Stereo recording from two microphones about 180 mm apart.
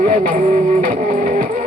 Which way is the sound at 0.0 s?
50° right (ahead or behind).